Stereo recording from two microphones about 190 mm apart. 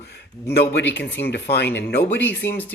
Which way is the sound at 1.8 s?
10° left (ahead or behind).